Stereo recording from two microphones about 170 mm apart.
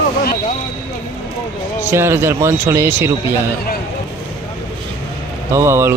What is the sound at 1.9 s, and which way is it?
Speech, 15° right (ahead or behind).